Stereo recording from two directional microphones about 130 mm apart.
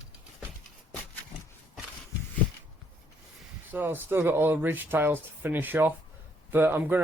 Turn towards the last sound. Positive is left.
turn(degrees=-15)  # may be behind; listen again after turning